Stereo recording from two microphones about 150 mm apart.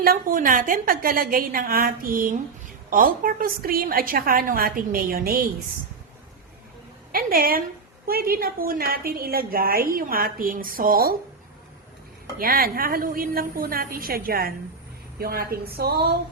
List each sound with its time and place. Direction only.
0.0 s a woman's voice: 70° right (ahead or behind)
7.1 s a woman's voice: 75° right (ahead or behind)
12.4 s a woman's voice: 75° right (ahead or behind); by 16.1 s 90° right